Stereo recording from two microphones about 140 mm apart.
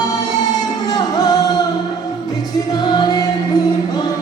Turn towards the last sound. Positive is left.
turn(degrees=30)  # may be behind; listen again after turning